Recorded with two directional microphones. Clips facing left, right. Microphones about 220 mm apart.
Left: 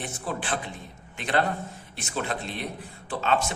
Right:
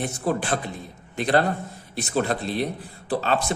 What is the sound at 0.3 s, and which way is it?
A man's voice, 40° right (ahead or behind).